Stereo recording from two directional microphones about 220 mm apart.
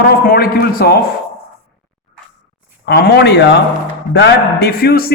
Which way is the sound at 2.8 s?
45° left (ahead or behind).